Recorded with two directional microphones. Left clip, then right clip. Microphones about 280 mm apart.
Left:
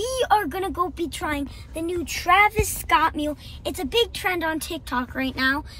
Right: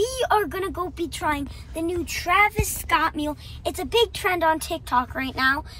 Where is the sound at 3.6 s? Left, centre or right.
Centre.